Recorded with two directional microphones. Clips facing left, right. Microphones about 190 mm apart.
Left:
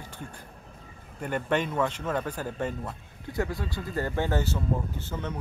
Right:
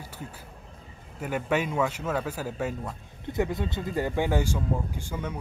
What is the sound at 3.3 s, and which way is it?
Speech, 20° right (ahead or behind).